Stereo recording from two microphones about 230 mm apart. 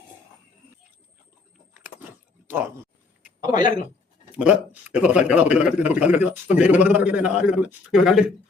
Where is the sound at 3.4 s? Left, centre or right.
Centre.